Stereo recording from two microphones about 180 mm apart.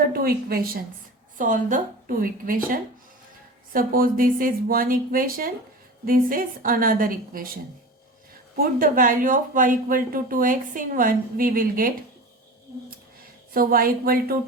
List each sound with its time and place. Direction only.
0.1 s a woman's voice: 55° right (ahead or behind)
8.5 s speech: 50° right (ahead or behind)
13.5 s speech: 55° right (ahead or behind)